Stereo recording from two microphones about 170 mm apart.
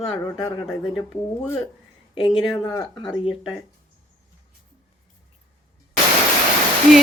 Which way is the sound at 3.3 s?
5° right (ahead or behind).